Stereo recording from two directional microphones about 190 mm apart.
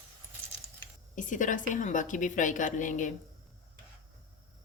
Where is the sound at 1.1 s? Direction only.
40° left (ahead or behind).